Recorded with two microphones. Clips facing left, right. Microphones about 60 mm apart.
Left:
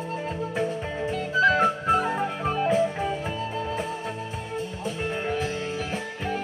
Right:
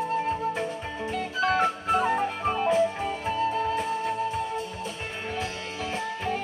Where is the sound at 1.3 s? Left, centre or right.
Left.